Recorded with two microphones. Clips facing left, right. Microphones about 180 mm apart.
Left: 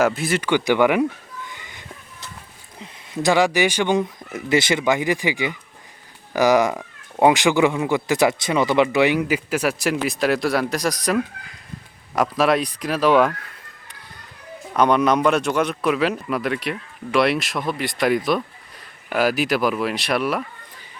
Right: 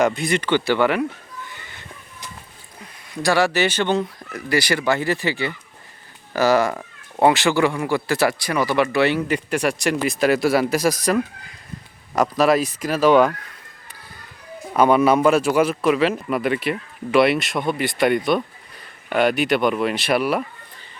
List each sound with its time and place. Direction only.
0.0 s speech: 5° left (ahead or behind)
1.5 s a sound: 15° left (ahead or behind)
2.8 s speech: 20° left (ahead or behind); by 10.9 s 5° right (ahead or behind)
12.1 s speech: centre (ahead or behind)
14.7 s speech: 5° right (ahead or behind)